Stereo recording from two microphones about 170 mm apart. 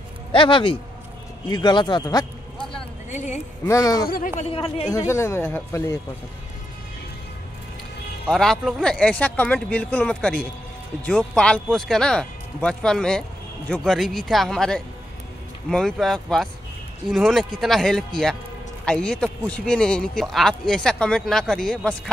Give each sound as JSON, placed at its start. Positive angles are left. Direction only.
{"t": 0.3, "sound": "a man's voice", "side_deg": 30}
{"t": 3.1, "sound": "a sound", "side_deg": 45}
{"t": 3.6, "sound": "a man's voice", "side_deg": 20}
{"t": 4.1, "sound": "speech", "side_deg": 50}
{"t": 4.5, "sound": "a man's voice", "side_deg": 35}
{"t": 4.9, "sound": "speech", "side_deg": 15}
{"t": 8.3, "sound": "speech", "side_deg": 0}